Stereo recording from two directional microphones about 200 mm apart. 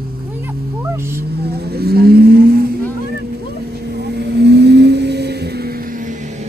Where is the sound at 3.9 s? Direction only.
55° right (ahead or behind).